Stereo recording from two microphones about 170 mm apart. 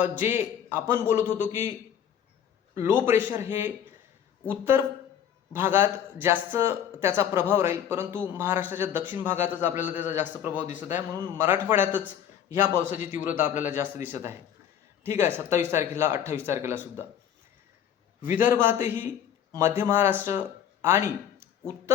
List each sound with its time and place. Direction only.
0.0 s a man's voice: 10° right (ahead or behind)
2.7 s a man's voice: 15° right (ahead or behind)
10.5 s speech: 45° left (ahead or behind)
10.8 s a man's voice: 15° right (ahead or behind)
18.3 s a man's voice: 10° right (ahead or behind)